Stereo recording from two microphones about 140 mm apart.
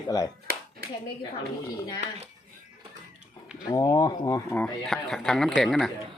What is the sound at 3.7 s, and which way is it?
Speech, 25° left (ahead or behind).